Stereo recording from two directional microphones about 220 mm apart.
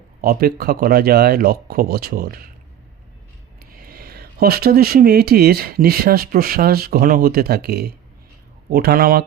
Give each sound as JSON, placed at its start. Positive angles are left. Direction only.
{"t": 0.2, "sound": "speech", "side_deg": -40}
{"t": 3.6, "sound": "speech", "side_deg": -40}